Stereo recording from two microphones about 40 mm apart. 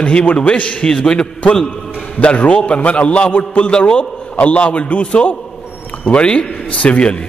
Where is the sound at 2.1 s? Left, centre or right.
Left.